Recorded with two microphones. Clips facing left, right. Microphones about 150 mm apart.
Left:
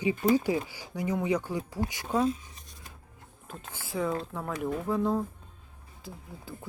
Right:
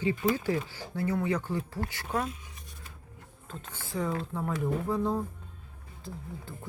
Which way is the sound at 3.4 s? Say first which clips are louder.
Even; 10° left (ahead or behind).